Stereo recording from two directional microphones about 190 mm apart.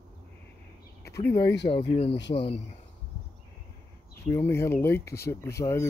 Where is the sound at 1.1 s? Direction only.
15° left (ahead or behind).